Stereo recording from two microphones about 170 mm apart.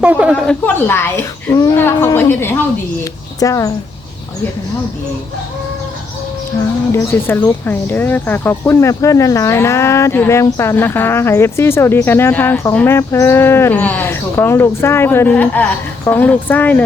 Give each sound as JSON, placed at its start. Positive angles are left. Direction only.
{"t": 0.0, "sound": "a woman's voice", "side_deg": -10}
{"t": 0.3, "sound": "speech", "side_deg": 5}
{"t": 6.6, "sound": "speech", "side_deg": 15}